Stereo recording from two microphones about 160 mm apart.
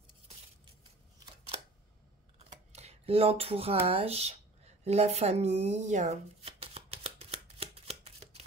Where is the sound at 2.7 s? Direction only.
40° right (ahead or behind).